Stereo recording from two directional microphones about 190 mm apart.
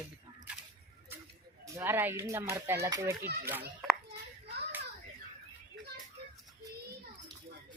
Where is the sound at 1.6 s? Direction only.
15° right (ahead or behind).